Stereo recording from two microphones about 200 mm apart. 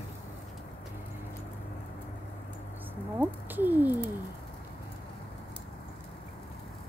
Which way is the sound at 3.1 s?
10° right (ahead or behind).